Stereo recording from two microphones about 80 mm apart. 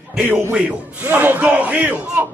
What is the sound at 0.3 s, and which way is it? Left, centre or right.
A man's voice, right.